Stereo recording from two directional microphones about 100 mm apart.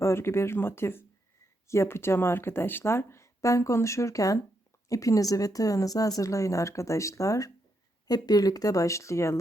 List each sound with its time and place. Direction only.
0.0 s speech: 25° left (ahead or behind)